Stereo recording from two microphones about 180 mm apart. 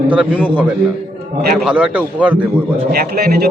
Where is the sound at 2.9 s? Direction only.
60° right (ahead or behind).